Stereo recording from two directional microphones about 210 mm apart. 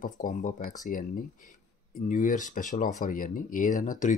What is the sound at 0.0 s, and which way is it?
Speech, 40° left (ahead or behind).